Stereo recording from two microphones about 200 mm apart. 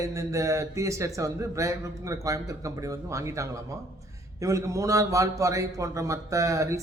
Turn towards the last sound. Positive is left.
turn(degrees=-15)  # may be behind; listen again after turning